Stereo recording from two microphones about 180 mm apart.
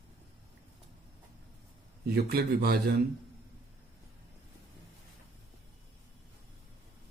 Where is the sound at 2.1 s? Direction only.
60° right (ahead or behind).